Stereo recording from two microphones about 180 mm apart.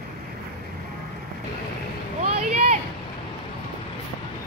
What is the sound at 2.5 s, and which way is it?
Vehicle, 40° right (ahead or behind).